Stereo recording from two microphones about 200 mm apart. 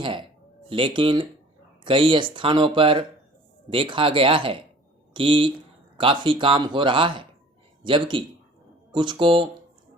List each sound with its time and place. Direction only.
0.0 s speech: 25° right (ahead or behind)